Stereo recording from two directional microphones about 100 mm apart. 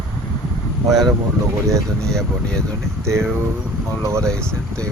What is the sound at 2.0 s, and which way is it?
Speech, 5° left (ahead or behind).